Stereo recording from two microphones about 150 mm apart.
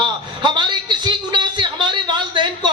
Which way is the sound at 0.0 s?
30° right (ahead or behind).